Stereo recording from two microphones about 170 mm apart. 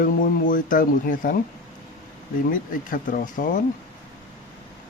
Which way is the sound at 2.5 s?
55° left (ahead or behind).